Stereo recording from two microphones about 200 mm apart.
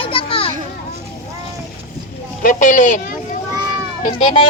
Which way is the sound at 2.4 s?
40° left (ahead or behind).